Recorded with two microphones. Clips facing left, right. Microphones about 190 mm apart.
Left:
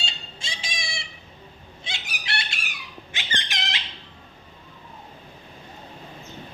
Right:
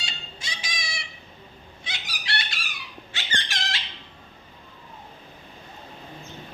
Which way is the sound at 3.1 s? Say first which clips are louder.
Even; 15° left (ahead or behind).